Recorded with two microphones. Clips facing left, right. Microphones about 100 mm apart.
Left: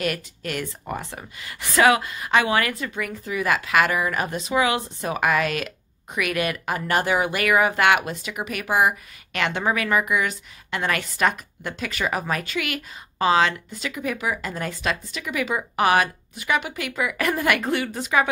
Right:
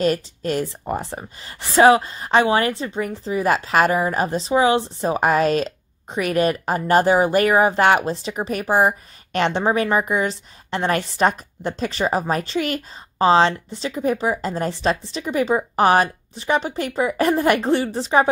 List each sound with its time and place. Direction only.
0.0 s speech: 35° right (ahead or behind)